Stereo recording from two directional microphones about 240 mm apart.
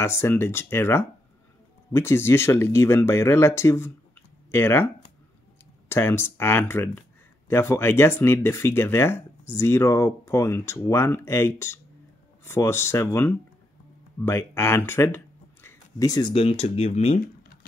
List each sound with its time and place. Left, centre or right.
0.0 s speech: centre; by 17.2 s left